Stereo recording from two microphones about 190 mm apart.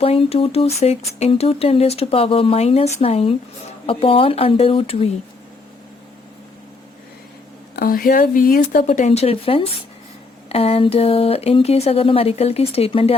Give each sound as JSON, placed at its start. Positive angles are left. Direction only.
{"t": 0.0, "sound": "speech", "side_deg": 30}
{"t": 7.8, "sound": "speech", "side_deg": 50}